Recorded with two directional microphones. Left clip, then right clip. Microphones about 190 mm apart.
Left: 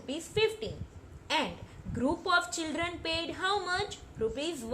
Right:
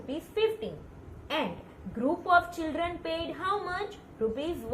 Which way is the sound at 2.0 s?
55° left (ahead or behind).